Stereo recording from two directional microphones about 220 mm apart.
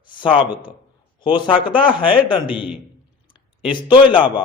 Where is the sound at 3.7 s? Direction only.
20° left (ahead or behind).